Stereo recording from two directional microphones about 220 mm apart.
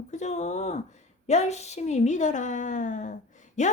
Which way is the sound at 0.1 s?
30° left (ahead or behind).